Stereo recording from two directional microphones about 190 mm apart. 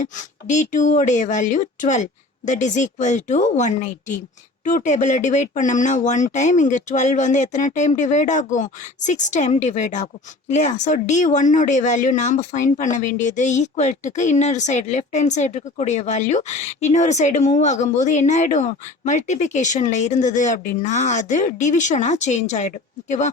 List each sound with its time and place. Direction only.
0.0 s speech: 40° left (ahead or behind)